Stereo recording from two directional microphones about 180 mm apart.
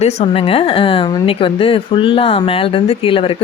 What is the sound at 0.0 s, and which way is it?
A woman's voice, 35° left (ahead or behind).